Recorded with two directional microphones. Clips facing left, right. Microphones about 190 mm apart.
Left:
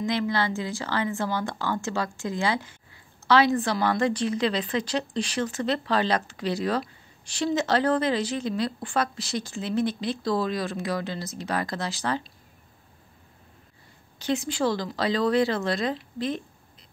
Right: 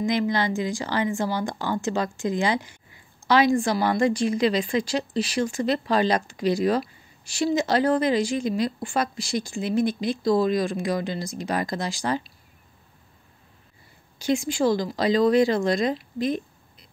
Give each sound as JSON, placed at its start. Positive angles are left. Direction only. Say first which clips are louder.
{"t": 0.0, "sound": "a woman's voice", "louder": "right 3 dB", "side_deg": -15}
{"t": 14.1, "sound": "speech", "louder": "right 3 dB", "side_deg": -10}